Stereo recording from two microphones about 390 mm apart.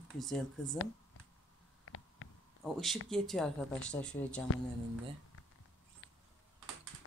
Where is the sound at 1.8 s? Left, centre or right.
Left.